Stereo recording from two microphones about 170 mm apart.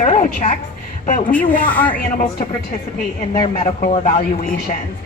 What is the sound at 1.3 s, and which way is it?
Speech, 10° left (ahead or behind).